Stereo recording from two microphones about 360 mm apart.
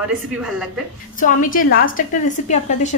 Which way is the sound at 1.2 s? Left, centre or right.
Left.